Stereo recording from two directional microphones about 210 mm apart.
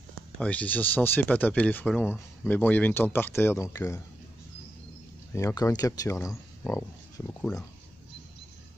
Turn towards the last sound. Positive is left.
turn(degrees=15)  # may be behind; listen again after turning